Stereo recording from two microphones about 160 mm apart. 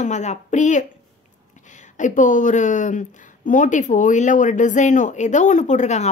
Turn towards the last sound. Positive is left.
turn(degrees=45)  # may be behind; listen again after turning